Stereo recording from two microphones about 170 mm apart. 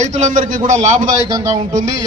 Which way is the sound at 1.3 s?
20° right (ahead or behind).